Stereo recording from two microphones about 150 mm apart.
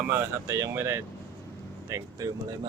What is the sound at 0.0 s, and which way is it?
Speech, 15° right (ahead or behind).